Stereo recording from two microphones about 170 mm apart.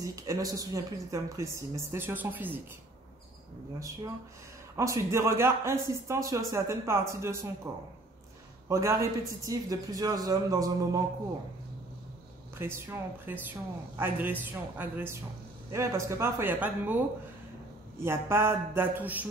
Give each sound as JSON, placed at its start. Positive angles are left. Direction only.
{"t": 0.0, "sound": "speech", "side_deg": -20}
{"t": 4.7, "sound": "a man's voice", "side_deg": -15}
{"t": 12.5, "sound": "speech", "side_deg": -15}